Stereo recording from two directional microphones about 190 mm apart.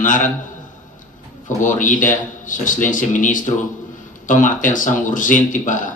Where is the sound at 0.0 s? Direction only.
40° left (ahead or behind).